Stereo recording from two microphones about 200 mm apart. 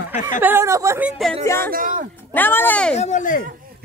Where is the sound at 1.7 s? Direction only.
45° right (ahead or behind).